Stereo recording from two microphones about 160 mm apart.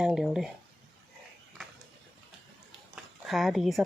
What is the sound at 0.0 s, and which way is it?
Speech, centre (ahead or behind).